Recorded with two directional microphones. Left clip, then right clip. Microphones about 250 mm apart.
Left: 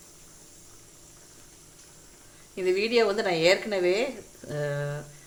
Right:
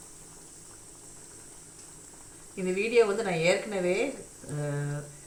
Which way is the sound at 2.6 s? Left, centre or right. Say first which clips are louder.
Left 1 dB; left.